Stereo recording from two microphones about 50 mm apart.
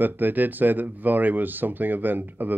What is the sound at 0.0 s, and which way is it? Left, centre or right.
Speech, right.